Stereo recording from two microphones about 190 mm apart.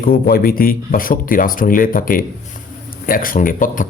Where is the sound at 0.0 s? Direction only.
50° left (ahead or behind).